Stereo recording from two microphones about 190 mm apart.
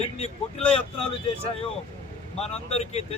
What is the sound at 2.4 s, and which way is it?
Speech, 35° left (ahead or behind).